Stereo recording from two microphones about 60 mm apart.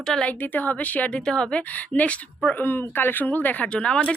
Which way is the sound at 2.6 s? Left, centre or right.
Left.